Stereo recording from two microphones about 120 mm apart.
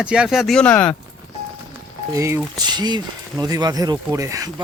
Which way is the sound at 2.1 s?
25° right (ahead or behind).